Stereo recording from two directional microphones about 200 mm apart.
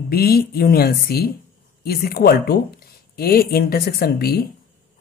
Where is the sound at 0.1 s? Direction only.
50° left (ahead or behind).